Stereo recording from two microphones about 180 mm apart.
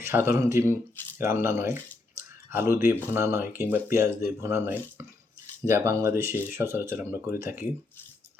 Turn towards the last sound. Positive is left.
turn(degrees=-15)  # may be behind; listen again after turning